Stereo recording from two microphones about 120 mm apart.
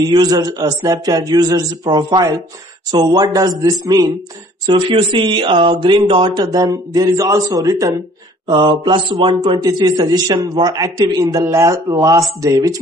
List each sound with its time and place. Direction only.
0.0 s a man's voice: 35° right (ahead or behind)
4.6 s speech: 40° right (ahead or behind)
6.4 s a man's voice: 30° right (ahead or behind)
8.5 s a man's voice: 40° right (ahead or behind)